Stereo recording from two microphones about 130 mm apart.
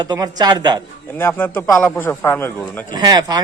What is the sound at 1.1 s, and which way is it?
Speech, 15° left (ahead or behind).